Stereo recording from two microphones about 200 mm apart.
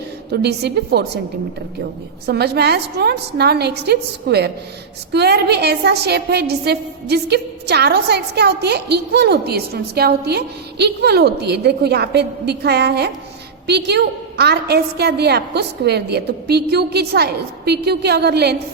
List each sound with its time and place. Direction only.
0.3 s a woman's voice: 55° right (ahead or behind)
2.2 s a woman's voice: 55° right (ahead or behind)